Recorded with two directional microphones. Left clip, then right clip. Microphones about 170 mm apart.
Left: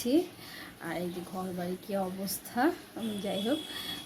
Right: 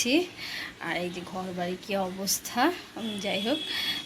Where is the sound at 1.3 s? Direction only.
Centre (ahead or behind).